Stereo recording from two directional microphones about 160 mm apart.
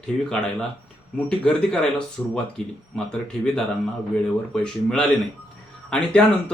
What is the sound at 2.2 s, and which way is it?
Speech, 15° left (ahead or behind).